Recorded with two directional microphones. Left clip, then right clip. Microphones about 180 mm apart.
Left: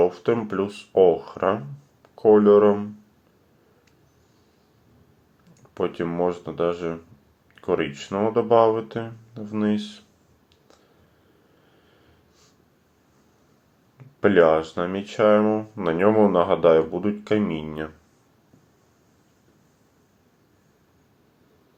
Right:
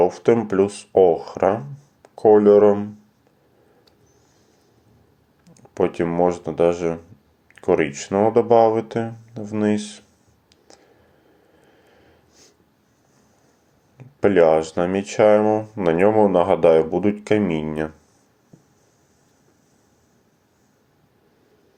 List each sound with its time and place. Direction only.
0.0 s speech: 25° right (ahead or behind)
5.7 s speech: 25° right (ahead or behind)
14.2 s speech: 25° right (ahead or behind)